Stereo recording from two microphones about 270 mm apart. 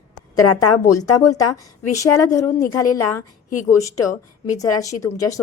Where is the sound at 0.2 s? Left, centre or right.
Left.